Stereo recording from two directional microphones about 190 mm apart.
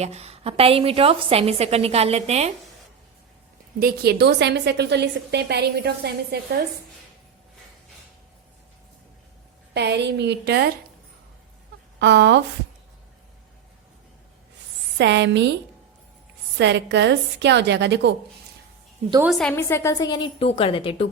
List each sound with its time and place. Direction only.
0.0 s a woman's voice: 35° right (ahead or behind)
3.8 s a woman's voice: 55° right (ahead or behind)
9.7 s a woman's voice: 60° right (ahead or behind)
11.9 s a woman's voice: 65° right (ahead or behind)
14.9 s a woman's voice: 65° right (ahead or behind)
16.6 s a woman's voice: 65° right (ahead or behind)
19.2 s a woman's voice: centre (ahead or behind); by 21.1 s 30° left (ahead or behind)